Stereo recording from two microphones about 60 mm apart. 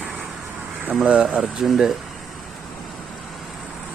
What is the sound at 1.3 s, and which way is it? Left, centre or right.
Speech, centre.